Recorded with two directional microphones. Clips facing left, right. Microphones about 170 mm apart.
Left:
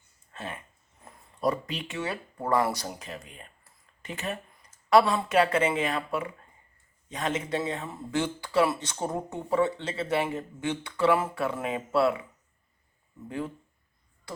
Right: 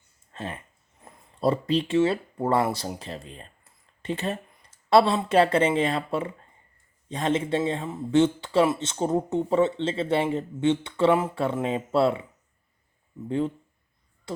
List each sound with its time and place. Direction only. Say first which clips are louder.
0.3 s speech: right 3 dB; 30° right (ahead or behind)
13.2 s speech: right 8 dB; 25° right (ahead or behind)